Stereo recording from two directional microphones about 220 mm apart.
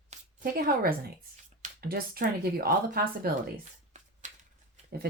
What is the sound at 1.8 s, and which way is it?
Speech, 45° right (ahead or behind).